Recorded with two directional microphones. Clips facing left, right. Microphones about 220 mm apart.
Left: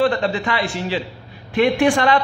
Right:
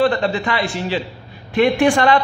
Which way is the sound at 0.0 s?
40° right (ahead or behind).